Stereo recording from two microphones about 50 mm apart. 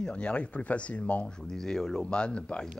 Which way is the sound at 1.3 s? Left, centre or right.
Centre.